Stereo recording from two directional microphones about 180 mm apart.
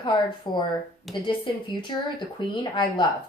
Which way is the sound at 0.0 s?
25° left (ahead or behind).